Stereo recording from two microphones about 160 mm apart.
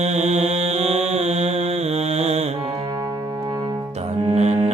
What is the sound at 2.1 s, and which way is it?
Mantra, 40° right (ahead or behind).